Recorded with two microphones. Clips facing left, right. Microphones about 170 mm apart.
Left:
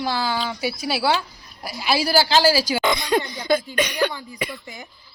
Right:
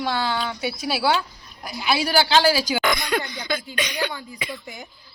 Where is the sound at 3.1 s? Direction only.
30° left (ahead or behind).